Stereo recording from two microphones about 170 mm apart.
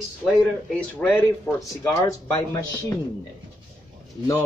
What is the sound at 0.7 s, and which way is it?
Speech, 10° left (ahead or behind).